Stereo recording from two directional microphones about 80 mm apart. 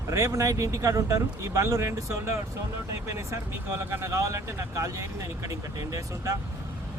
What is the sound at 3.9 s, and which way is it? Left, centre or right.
Speech, right.